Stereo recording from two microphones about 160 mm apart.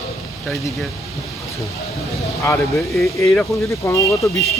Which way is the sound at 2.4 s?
20° left (ahead or behind).